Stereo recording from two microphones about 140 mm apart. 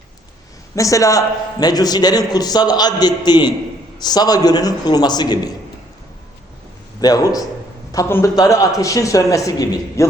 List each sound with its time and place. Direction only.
0.8 s a man's voice: 25° left (ahead or behind)
7.0 s a man's voice: 25° left (ahead or behind)